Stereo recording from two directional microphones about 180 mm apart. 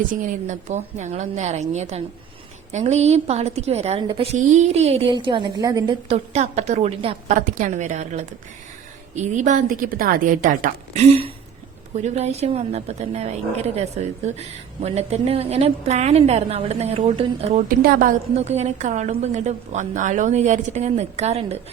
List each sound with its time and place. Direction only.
0.1 s a woman's voice: 45° right (ahead or behind); by 6.1 s 25° right (ahead or behind)
6.1 s a woman's voice: 35° right (ahead or behind)
7.3 s a woman's voice: 45° right (ahead or behind)
17.7 s a woman's voice: 50° right (ahead or behind)
18.3 s a woman's voice: 40° right (ahead or behind)